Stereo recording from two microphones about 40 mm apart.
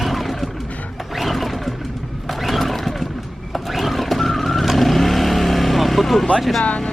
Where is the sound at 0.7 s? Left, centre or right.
Left.